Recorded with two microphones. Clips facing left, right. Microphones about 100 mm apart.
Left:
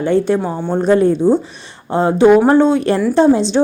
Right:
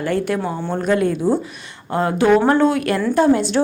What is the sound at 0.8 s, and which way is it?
A woman's voice, 30° left (ahead or behind).